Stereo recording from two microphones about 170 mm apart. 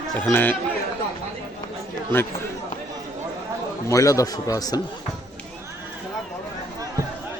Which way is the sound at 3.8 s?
20° left (ahead or behind).